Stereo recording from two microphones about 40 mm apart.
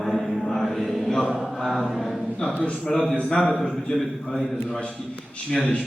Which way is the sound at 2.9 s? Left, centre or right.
Centre.